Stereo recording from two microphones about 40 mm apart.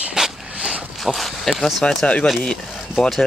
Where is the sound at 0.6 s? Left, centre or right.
Right.